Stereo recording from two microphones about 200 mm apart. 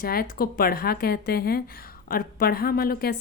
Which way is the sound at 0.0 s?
50° left (ahead or behind).